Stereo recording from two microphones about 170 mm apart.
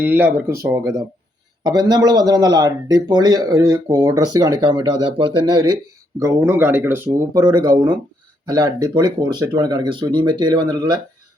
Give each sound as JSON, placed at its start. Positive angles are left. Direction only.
{"t": 0.0, "sound": "a man's voice", "side_deg": -10}